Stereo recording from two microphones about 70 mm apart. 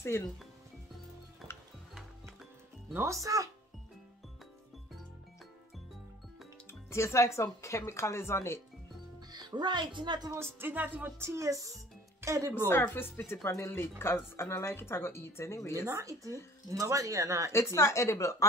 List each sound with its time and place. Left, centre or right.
3.1 s speech: right
6.7 s speech: left
9.3 s speech: right
10.6 s speech: right
11.1 s speech: right
12.6 s speech: left
13.3 s speech: left
15.8 s speech: right
17.5 s speech: left